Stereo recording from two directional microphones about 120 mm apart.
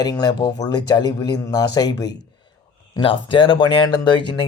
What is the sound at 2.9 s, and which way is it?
Speech, 45° left (ahead or behind).